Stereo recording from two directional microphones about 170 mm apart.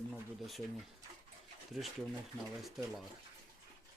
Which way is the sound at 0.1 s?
Centre (ahead or behind).